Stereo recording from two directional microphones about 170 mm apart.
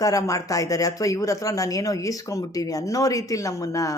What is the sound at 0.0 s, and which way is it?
Speech, 20° left (ahead or behind).